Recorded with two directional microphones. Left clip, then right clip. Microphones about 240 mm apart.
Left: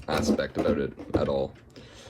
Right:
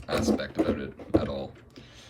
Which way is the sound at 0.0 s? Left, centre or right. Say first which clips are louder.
Left 1 dB; centre.